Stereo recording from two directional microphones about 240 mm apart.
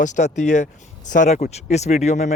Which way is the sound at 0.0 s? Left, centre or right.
Left.